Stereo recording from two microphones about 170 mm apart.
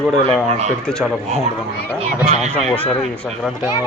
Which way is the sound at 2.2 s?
40° right (ahead or behind).